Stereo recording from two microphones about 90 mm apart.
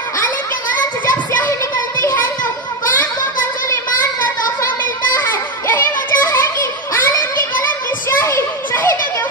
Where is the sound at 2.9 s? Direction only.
20° left (ahead or behind).